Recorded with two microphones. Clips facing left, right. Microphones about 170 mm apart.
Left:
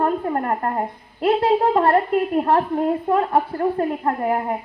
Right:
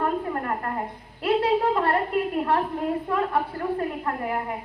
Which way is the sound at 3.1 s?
45° left (ahead or behind).